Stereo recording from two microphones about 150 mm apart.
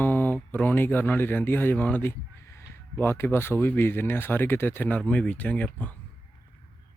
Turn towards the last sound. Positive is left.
turn(degrees=10)  # may be behind; listen again after turning